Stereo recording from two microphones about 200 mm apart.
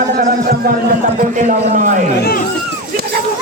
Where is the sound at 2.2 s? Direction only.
50° left (ahead or behind).